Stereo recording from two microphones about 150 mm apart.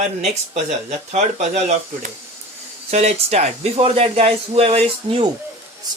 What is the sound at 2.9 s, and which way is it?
Speech, 45° right (ahead or behind).